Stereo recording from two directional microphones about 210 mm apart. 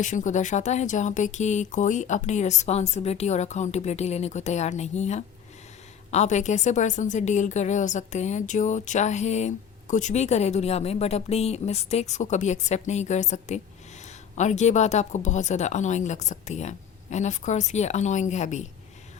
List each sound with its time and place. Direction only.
0.0 s speech: 35° left (ahead or behind)